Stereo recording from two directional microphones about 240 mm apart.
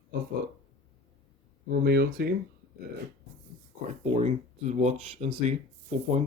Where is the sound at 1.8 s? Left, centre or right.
Right.